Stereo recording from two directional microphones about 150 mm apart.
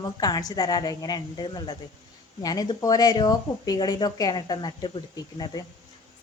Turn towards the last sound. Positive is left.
turn(degrees=25)  # may be behind; listen again after turning